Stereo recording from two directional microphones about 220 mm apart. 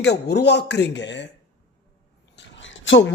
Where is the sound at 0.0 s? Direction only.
50° left (ahead or behind).